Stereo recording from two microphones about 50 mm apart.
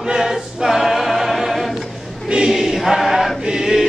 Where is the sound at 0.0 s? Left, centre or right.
Centre.